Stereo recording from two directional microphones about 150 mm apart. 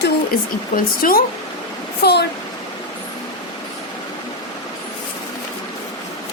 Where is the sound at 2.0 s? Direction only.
90° left.